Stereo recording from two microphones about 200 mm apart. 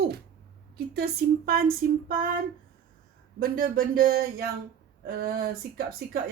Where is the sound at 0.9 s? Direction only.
50° right (ahead or behind).